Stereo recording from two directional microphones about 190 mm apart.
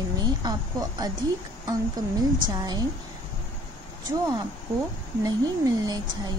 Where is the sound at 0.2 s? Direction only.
20° right (ahead or behind).